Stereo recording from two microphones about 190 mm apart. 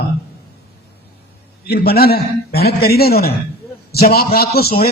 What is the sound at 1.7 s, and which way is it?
A man's voice, 55° left (ahead or behind).